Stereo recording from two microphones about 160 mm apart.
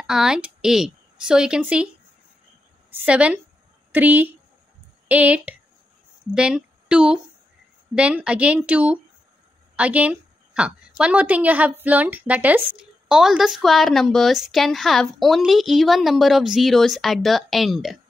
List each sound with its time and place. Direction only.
0.0 s speech: 5° right (ahead or behind)
3.1 s a woman's voice: 10° right (ahead or behind)